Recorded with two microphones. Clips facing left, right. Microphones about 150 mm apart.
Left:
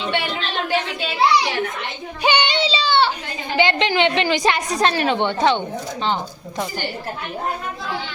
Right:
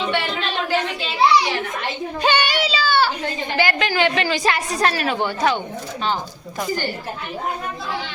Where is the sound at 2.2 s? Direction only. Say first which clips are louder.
Left 1 dB; 15° left (ahead or behind).